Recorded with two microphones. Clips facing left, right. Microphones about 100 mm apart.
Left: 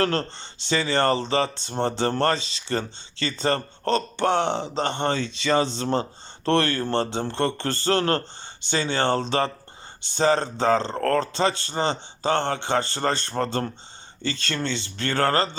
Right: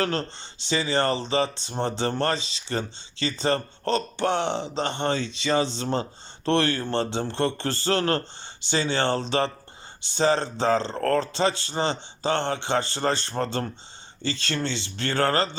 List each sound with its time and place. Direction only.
0.3 s speech: 55° left (ahead or behind)